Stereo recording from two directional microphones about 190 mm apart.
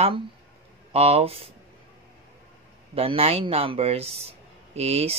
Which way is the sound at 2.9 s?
30° right (ahead or behind).